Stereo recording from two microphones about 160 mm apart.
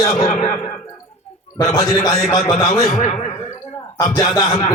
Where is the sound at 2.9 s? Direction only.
45° left (ahead or behind).